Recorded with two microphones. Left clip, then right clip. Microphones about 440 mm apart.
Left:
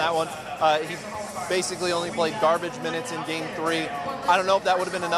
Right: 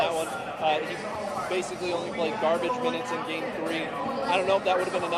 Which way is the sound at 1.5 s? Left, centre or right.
Left.